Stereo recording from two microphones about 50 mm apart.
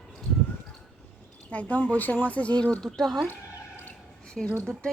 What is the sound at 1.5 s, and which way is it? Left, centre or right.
Speech, left.